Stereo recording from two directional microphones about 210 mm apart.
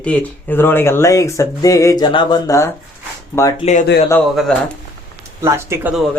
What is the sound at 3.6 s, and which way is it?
Speech, 35° left (ahead or behind).